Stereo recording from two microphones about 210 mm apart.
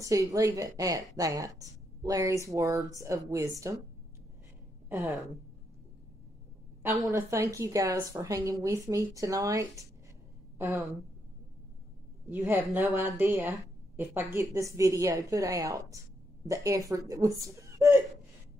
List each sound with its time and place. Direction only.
0.0 s a woman's voice: 15° right (ahead or behind)
4.8 s a sound: 10° right (ahead or behind)
6.8 s a woman's voice: 10° right (ahead or behind)
12.3 s a woman's voice: 10° right (ahead or behind)